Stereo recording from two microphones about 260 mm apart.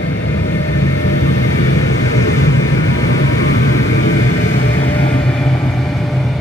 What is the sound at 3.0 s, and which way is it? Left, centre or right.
Vehicle, left.